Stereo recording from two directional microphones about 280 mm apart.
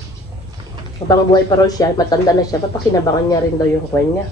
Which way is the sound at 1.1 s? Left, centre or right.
Centre.